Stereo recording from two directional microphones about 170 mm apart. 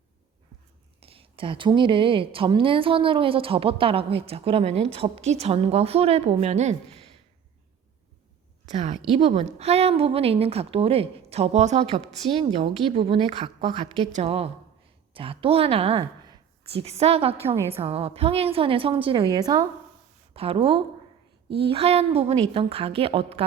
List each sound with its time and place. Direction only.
0.9 s a woman's voice: 35° right (ahead or behind)
8.6 s a woman's voice: 40° right (ahead or behind); by 19.6 s 25° right (ahead or behind)
20.3 s a woman's voice: 35° right (ahead or behind)